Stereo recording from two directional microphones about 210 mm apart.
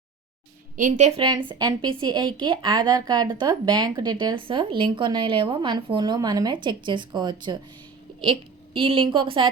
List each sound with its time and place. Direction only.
0.8 s a woman's voice: 35° right (ahead or behind)